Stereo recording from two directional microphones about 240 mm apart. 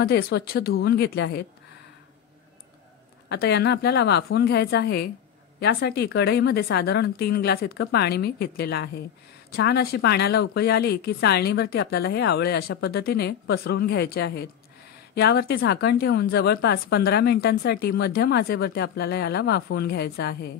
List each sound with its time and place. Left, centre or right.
0.0 s speech: left
3.3 s speech: left